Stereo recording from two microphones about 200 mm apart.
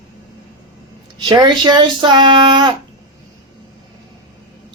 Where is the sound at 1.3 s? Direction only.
20° right (ahead or behind).